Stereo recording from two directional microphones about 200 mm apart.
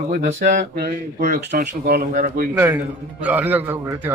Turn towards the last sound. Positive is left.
turn(degrees=-10)  # may be behind; listen again after turning